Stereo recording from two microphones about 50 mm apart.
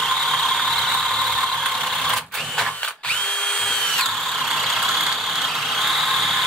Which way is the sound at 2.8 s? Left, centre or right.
Centre.